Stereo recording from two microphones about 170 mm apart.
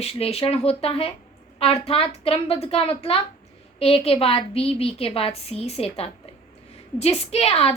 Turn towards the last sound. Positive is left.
turn(degrees=35)  # may be behind; listen again after turning